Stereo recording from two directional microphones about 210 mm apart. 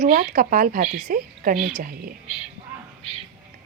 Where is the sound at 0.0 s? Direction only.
40° right (ahead or behind).